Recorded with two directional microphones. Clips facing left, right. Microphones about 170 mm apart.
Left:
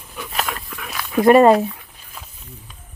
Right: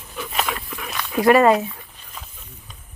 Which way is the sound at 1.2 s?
30° left (ahead or behind).